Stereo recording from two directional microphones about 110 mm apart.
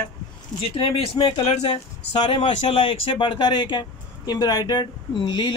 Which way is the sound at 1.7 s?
60° left (ahead or behind).